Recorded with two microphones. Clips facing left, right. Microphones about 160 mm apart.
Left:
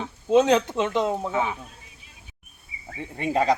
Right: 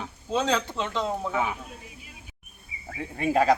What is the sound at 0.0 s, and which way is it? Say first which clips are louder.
Speech: left 8 dB; 20° left (ahead or behind).